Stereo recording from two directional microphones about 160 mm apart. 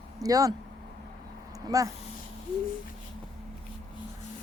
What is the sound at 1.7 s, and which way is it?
Speech, 20° right (ahead or behind).